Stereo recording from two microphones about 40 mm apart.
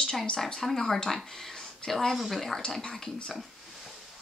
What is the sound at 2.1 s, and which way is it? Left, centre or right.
Speech, centre.